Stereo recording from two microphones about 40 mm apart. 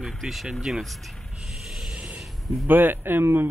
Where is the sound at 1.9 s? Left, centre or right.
Right.